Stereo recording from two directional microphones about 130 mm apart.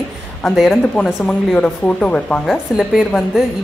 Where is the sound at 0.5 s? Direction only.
Centre (ahead or behind).